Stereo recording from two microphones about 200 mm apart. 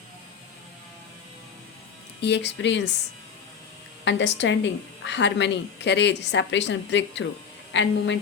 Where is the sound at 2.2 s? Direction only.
60° left (ahead or behind).